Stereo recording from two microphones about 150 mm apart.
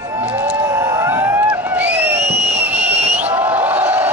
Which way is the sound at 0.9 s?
15° right (ahead or behind).